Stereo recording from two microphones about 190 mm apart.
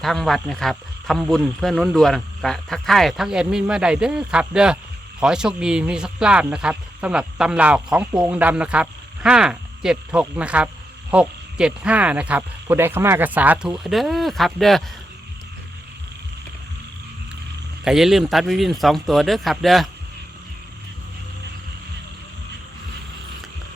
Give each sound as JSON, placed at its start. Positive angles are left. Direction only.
{"t": 0.0, "sound": "speech", "side_deg": 0}
{"t": 17.8, "sound": "speech", "side_deg": 0}